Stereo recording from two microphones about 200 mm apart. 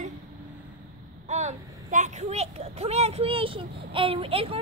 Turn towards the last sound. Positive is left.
turn(degrees=-30)  # may be behind; listen again after turning